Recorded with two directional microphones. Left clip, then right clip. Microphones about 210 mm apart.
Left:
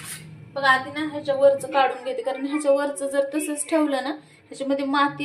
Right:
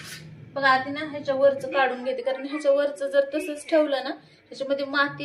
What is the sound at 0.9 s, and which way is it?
A woman's voice, 30° left (ahead or behind).